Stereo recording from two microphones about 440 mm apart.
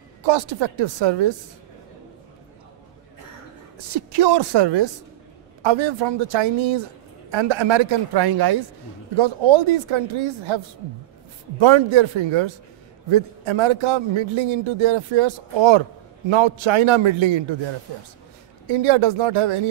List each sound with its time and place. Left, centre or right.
0.2 s a man's voice: right
3.7 s speech: right
5.6 s a man's voice: right
9.1 s a man's voice: right
11.5 s a man's voice: right
13.1 s a man's voice: right
18.7 s a man's voice: right